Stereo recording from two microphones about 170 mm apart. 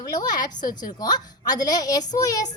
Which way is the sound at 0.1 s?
25° left (ahead or behind).